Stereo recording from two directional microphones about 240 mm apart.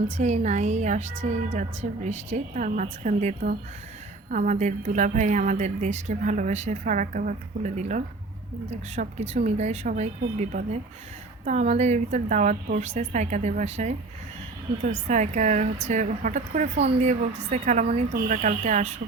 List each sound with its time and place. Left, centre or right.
0.2 s a woman's voice: right
15.0 s a woman's voice: right